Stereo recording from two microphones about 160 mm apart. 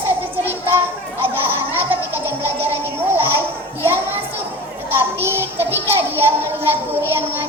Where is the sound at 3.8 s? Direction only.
15° right (ahead or behind).